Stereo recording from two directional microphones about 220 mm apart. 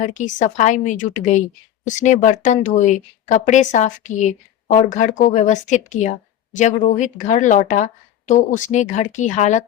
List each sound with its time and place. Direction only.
0.0 s speech: 35° left (ahead or behind)